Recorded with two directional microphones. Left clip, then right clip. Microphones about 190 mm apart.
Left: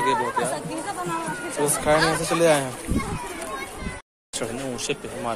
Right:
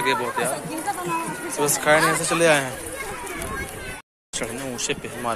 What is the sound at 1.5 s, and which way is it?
A man's voice, 5° left (ahead or behind).